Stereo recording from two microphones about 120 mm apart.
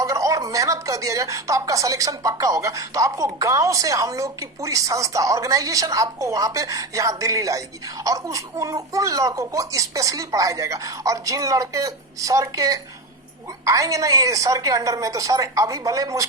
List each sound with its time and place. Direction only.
0.0 s speech: 25° right (ahead or behind)